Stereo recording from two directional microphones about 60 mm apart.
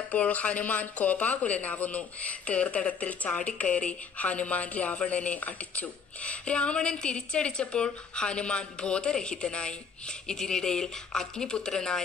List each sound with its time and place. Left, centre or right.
0.1 s a woman's voice: left